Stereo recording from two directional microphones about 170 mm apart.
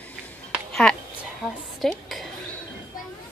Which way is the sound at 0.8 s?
5° left (ahead or behind).